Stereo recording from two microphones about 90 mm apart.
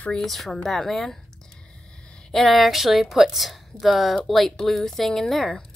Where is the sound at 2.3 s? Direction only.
5° left (ahead or behind).